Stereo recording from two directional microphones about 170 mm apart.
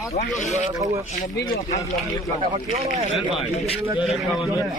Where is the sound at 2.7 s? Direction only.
40° right (ahead or behind).